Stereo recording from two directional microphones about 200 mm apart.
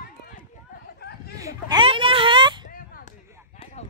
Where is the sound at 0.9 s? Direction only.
55° left (ahead or behind).